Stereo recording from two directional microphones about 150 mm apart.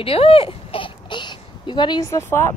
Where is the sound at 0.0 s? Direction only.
40° left (ahead or behind).